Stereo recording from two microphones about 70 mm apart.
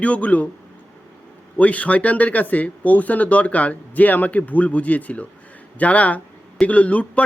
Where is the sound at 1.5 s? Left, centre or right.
Left.